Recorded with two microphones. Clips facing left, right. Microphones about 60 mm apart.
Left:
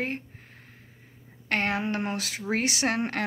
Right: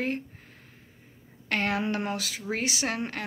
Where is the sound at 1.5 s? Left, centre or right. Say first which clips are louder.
Even; left.